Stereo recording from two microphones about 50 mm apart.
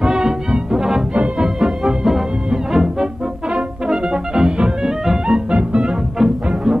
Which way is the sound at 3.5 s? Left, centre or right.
Centre.